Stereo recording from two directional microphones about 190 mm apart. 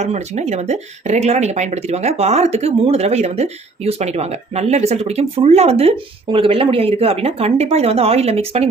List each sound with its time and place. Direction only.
0.0 s speech: 35° right (ahead or behind)